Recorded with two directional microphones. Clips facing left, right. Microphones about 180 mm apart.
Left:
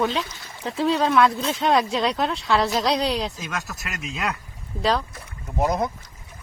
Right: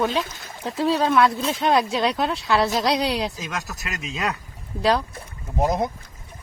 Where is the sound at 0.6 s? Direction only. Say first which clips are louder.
Even; centre (ahead or behind).